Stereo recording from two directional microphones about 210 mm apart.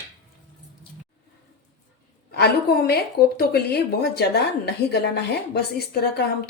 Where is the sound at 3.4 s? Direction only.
50° left (ahead or behind).